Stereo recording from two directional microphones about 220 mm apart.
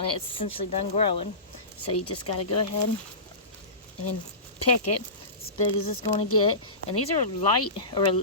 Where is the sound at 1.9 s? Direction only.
90° left.